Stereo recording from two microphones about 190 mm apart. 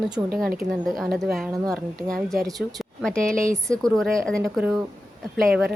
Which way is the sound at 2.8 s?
5° left (ahead or behind).